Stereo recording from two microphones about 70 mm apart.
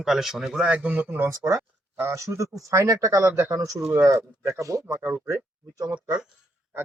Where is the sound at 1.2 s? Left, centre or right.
Right.